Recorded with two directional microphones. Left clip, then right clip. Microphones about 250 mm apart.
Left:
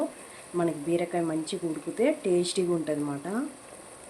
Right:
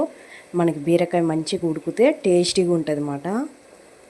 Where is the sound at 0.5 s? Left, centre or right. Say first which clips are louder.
Right 8 dB; right.